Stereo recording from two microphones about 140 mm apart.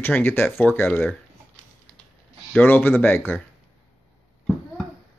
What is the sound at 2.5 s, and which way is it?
Speech, 10° left (ahead or behind).